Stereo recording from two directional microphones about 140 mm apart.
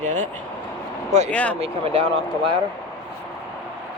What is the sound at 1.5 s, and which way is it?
Speech, 45° right (ahead or behind).